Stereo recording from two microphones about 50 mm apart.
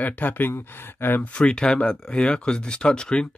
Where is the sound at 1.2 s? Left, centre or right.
Left.